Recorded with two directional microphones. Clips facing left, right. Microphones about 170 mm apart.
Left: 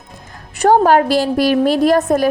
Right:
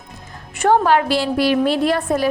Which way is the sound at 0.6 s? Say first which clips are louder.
Left 4 dB; 40° left (ahead or behind).